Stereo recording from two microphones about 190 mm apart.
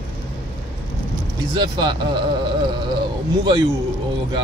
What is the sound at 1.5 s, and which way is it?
Speech, 20° right (ahead or behind).